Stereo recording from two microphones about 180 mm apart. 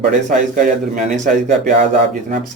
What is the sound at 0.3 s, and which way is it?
Speech, 45° right (ahead or behind).